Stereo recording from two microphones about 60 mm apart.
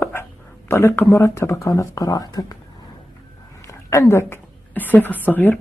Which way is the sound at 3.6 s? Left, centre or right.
Left.